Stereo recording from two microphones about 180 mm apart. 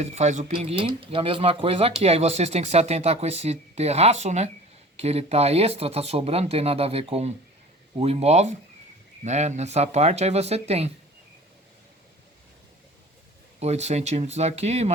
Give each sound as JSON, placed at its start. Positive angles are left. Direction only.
{"t": 0.0, "sound": "speech", "side_deg": -40}
{"t": 13.6, "sound": "speech", "side_deg": -35}